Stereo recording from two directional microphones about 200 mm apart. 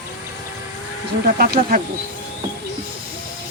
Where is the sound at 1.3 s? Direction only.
45° right (ahead or behind).